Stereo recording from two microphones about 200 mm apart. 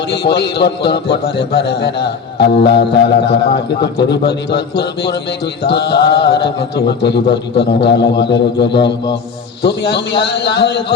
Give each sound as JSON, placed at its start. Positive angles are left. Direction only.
{"t": 0.1, "sound": "a man's voice", "side_deg": 55}